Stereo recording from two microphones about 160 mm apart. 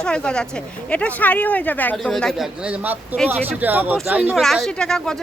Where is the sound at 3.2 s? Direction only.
10° right (ahead or behind).